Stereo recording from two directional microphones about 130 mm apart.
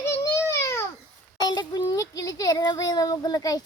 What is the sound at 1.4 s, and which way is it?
A child's voice, 35° left (ahead or behind).